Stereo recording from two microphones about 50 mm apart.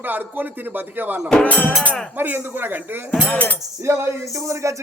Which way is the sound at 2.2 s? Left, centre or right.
Right.